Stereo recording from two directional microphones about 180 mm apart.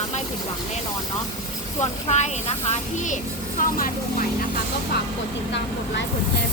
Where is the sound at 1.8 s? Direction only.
40° left (ahead or behind).